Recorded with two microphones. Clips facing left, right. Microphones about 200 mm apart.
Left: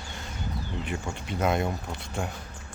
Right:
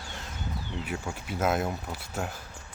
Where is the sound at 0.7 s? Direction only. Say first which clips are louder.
Even; 5° right (ahead or behind).